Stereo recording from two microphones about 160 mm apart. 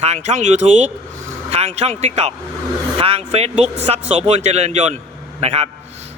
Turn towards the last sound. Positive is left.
turn(degrees=-40)  # may be behind; listen again after turning